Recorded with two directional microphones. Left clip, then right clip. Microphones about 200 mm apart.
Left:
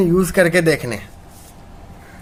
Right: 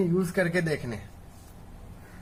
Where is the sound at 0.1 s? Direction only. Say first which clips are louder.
Left 12 dB; 40° left (ahead or behind).